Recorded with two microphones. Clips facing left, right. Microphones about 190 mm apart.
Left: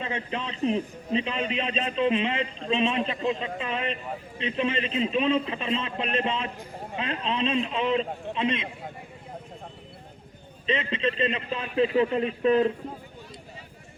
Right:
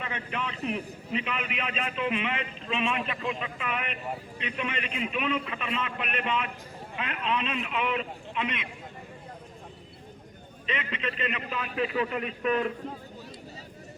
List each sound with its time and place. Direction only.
0.0 s a man's voice: 30° left (ahead or behind)
10.7 s a man's voice: 30° left (ahead or behind)